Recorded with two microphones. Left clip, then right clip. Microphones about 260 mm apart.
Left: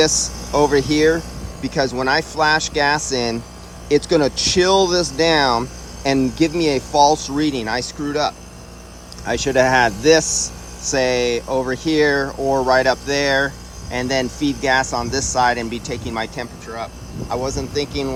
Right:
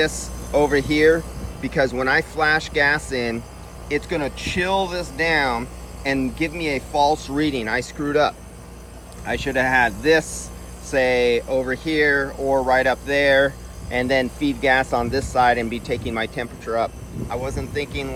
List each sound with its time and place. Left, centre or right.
0.0 s speech: centre
9.2 s speech: centre
17.2 s speech: centre